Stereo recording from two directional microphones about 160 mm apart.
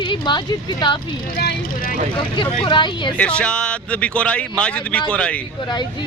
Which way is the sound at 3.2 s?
5° left (ahead or behind).